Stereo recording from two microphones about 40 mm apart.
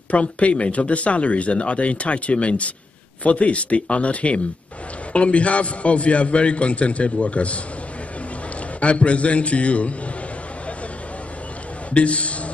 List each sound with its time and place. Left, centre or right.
0.1 s speech: left
8.7 s speech: left
11.9 s speech: left